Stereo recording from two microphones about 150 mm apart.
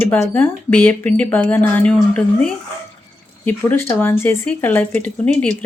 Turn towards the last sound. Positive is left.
turn(degrees=10)  # may be behind; listen again after turning